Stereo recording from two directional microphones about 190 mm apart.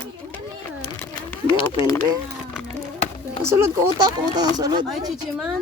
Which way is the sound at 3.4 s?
15° right (ahead or behind).